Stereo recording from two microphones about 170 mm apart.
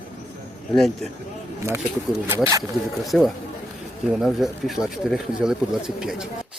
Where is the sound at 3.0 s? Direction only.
Centre (ahead or behind).